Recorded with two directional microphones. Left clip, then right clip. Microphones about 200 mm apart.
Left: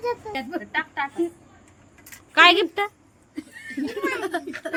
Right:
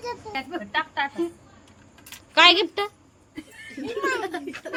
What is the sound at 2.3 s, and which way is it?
Speech, centre (ahead or behind).